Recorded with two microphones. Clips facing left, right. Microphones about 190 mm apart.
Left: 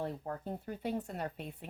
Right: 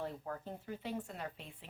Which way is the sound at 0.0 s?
40° left (ahead or behind).